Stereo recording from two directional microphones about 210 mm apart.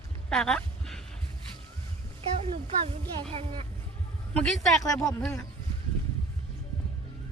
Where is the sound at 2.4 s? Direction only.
25° right (ahead or behind).